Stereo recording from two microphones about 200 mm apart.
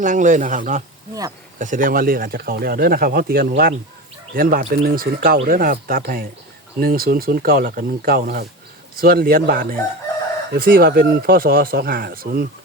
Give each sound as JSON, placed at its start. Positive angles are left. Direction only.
{"t": 0.0, "sound": "speech", "side_deg": -40}